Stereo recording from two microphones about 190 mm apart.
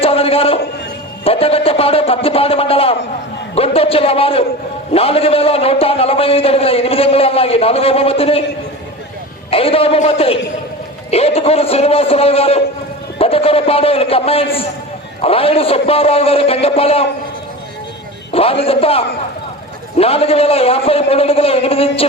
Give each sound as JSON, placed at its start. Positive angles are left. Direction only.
{"t": 0.0, "sound": "a sound", "side_deg": 30}
{"t": 1.2, "sound": "a man's voice", "side_deg": 30}
{"t": 9.5, "sound": "a man's voice", "side_deg": 30}
{"t": 18.3, "sound": "a man's voice", "side_deg": 30}